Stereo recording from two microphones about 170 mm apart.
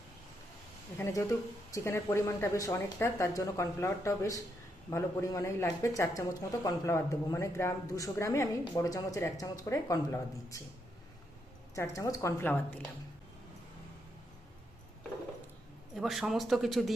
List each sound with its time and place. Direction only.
0.9 s speech: 15° left (ahead or behind)
11.7 s speech: 20° left (ahead or behind)
16.0 s speech: centre (ahead or behind)